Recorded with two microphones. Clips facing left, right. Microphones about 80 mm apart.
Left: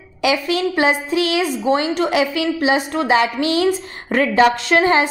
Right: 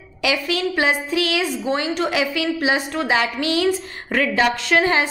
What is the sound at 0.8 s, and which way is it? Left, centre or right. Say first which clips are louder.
A woman's voice: left 3 dB; left.